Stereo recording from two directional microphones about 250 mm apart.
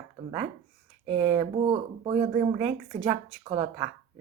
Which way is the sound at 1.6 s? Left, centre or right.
Right.